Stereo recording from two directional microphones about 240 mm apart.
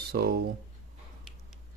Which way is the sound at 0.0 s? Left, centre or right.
Right.